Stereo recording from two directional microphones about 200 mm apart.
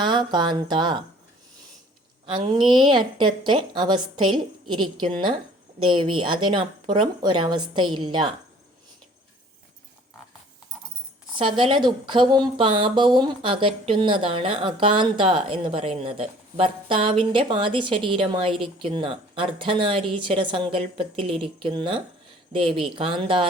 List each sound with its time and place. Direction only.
0.0 s a woman's voice: 20° right (ahead or behind)
2.2 s a woman's voice: 25° right (ahead or behind)
11.3 s a woman's voice: 25° right (ahead or behind)